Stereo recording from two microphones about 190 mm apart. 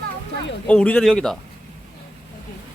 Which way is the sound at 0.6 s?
5° left (ahead or behind).